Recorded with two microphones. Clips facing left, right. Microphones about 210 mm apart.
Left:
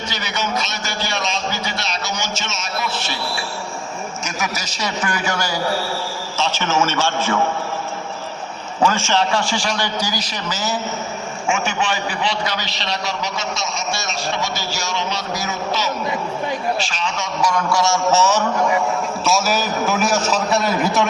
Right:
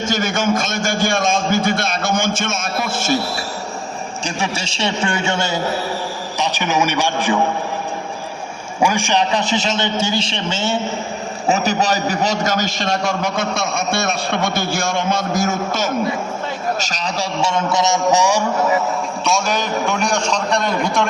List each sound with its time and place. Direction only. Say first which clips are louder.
0.1 s a sound: right 7 dB; 50° right (ahead or behind)
4.2 s a man's voice: right 5 dB; 30° right (ahead or behind)
8.8 s a man's voice: right 1 dB; 15° right (ahead or behind)
11.4 s a man's voice: right 4 dB; 35° right (ahead or behind); by 18.4 s 15° right (ahead or behind)
19.2 s a man's voice: even; 5° left (ahead or behind)